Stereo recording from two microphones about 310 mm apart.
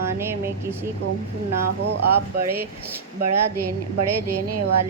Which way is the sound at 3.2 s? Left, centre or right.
Right.